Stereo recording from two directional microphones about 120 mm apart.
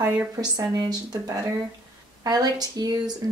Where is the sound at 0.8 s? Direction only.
35° right (ahead or behind).